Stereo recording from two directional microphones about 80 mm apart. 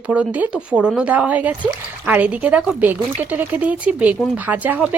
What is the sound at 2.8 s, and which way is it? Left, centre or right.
Speech, right.